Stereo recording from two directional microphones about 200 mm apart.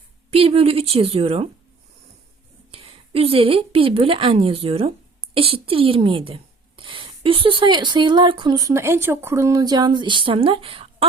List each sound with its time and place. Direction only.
0.3 s speech: 30° right (ahead or behind)
2.7 s speech: 30° right (ahead or behind)